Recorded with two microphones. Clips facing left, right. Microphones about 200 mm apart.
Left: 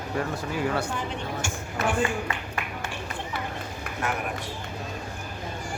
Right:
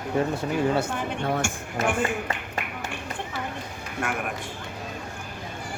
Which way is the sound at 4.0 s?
50° right (ahead or behind).